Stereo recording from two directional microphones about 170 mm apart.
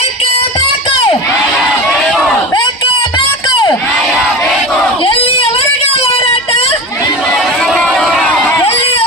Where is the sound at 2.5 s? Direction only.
25° left (ahead or behind).